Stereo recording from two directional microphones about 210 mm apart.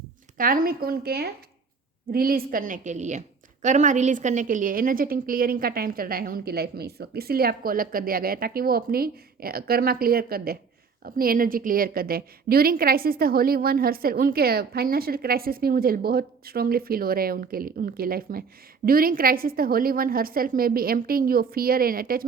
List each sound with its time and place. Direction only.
0.3 s a woman's voice: 40° right (ahead or behind)